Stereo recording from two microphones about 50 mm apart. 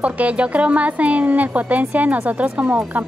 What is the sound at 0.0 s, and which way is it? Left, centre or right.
A woman's voice, right.